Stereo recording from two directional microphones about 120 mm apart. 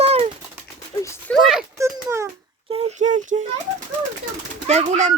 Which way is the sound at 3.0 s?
90° right.